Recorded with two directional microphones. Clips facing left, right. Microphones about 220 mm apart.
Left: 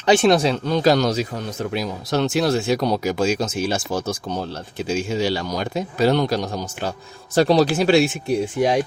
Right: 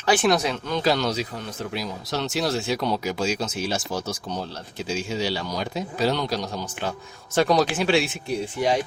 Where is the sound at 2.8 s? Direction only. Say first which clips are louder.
Left 5 dB; 45° left (ahead or behind).